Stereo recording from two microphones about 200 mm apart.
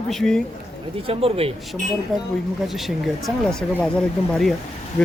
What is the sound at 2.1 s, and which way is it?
Speech, centre (ahead or behind).